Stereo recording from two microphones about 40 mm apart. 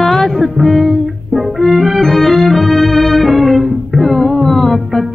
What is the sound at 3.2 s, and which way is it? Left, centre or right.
Music, centre.